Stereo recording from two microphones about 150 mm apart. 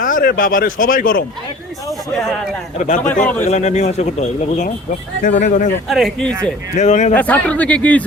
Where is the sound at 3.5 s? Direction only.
50° left (ahead or behind).